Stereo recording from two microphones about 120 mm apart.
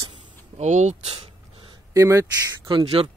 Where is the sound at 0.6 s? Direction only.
85° right.